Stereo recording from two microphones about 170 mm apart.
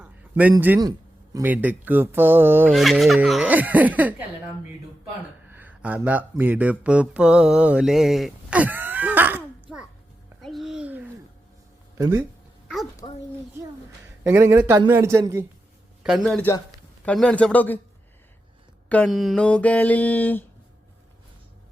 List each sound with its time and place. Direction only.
0.0 s a sound: 10° right (ahead or behind)
0.8 s speech: 20° right (ahead or behind)
2.6 s speech: centre (ahead or behind)
5.5 s speech: 10° right (ahead or behind)
10.4 s babbling: centre (ahead or behind)
12.6 s a sound: centre (ahead or behind)
14.3 s speech: 15° right (ahead or behind)
16.0 s a man's voice: centre (ahead or behind)
17.1 s mantra: 5° left (ahead or behind)
18.9 s mantra: 5° left (ahead or behind)